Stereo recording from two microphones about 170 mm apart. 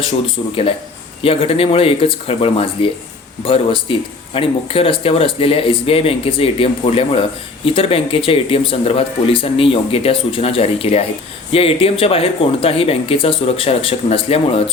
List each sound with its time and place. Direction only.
1.2 s speech: 35° left (ahead or behind)